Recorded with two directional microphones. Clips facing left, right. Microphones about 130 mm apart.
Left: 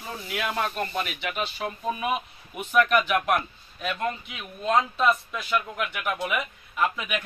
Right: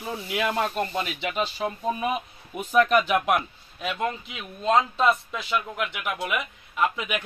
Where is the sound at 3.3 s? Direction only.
15° right (ahead or behind).